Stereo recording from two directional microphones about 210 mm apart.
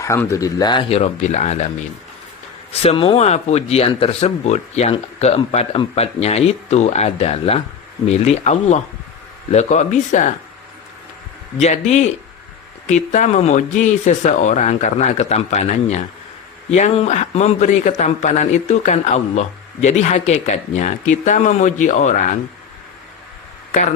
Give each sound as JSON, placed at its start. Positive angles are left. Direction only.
{"t": 0.0, "sound": "speech", "side_deg": 15}
{"t": 2.8, "sound": "a man's voice", "side_deg": 25}
{"t": 11.6, "sound": "a man's voice", "side_deg": 35}